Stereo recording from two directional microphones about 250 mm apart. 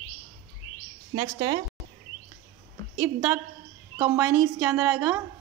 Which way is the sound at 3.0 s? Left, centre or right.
Centre.